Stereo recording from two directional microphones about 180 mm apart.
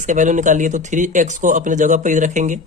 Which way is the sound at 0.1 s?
45° right (ahead or behind).